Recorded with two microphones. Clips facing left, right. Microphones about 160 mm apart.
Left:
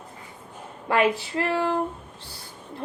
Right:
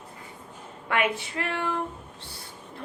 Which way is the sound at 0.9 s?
35° left (ahead or behind).